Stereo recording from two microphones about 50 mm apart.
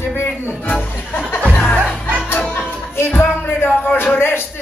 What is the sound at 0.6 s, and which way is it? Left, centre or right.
Speech, left.